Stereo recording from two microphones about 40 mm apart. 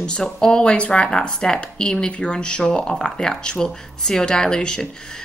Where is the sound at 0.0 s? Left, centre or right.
Centre.